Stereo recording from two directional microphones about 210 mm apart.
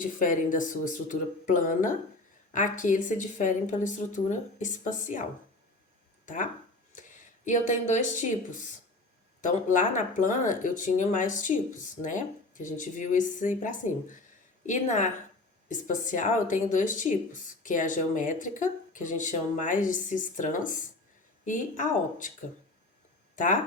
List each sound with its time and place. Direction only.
0.0 s speech: 40° left (ahead or behind)
6.2 s speech: 40° left (ahead or behind)
23.3 s speech: 40° left (ahead or behind)